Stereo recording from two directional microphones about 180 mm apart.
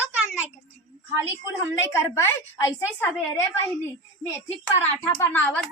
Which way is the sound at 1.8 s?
15° left (ahead or behind).